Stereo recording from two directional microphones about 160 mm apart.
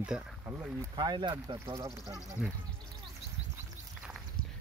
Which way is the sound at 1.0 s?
30° right (ahead or behind).